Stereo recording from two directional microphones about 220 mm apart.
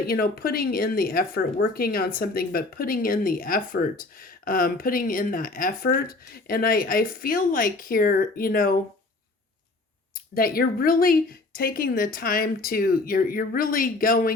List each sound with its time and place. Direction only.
0.1 s speech: 45° left (ahead or behind)
10.2 s speech: 40° left (ahead or behind)